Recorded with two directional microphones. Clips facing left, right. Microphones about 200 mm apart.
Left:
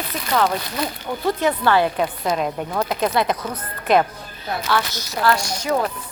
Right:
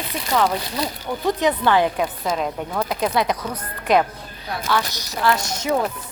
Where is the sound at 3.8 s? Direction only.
10° right (ahead or behind).